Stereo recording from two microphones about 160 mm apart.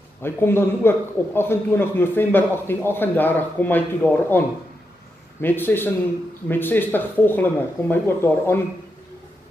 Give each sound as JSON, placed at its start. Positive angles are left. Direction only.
{"t": 0.2, "sound": "a man's voice", "side_deg": 15}